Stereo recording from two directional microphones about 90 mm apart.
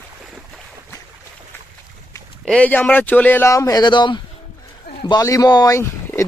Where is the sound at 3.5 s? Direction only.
35° left (ahead or behind).